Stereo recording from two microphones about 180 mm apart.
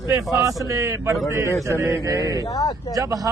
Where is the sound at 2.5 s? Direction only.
20° left (ahead or behind).